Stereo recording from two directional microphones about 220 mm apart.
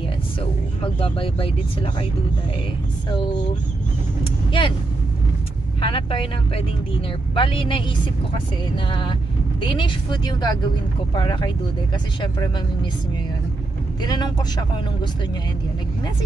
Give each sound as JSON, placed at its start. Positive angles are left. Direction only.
{"t": 0.8, "sound": "speech", "side_deg": 25}
{"t": 4.5, "sound": "speech", "side_deg": 20}
{"t": 5.8, "sound": "speech", "side_deg": 25}
{"t": 14.0, "sound": "speech", "side_deg": 20}